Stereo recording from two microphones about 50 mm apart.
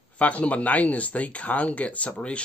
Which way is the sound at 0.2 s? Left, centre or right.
Left.